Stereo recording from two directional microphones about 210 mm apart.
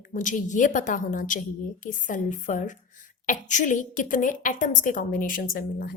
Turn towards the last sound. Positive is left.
turn(degrees=45)  # may be behind; listen again after turning